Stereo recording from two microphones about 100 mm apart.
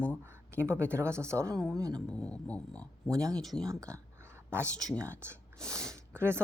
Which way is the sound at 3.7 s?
30° right (ahead or behind).